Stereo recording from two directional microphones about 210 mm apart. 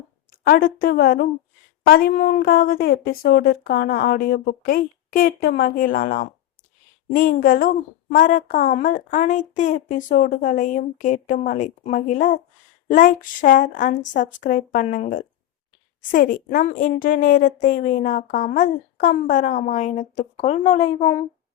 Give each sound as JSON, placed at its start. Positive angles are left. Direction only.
{"t": 0.3, "sound": "a woman's voice", "side_deg": 45}